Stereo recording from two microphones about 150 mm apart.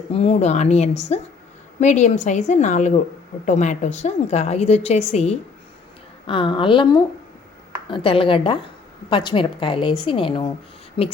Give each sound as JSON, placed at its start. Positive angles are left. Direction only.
{"t": 0.1, "sound": "a woman's voice", "side_deg": 45}
{"t": 6.2, "sound": "a woman's voice", "side_deg": 35}